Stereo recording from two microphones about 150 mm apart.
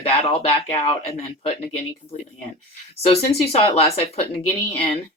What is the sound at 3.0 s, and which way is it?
Speech, 40° left (ahead or behind).